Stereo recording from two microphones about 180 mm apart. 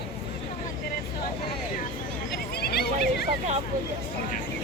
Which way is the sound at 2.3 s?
60° left (ahead or behind).